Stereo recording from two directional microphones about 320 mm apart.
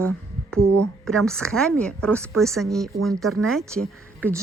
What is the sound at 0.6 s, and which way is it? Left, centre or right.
Speech, right.